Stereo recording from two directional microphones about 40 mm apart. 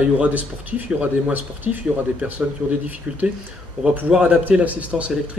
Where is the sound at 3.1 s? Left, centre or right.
Right.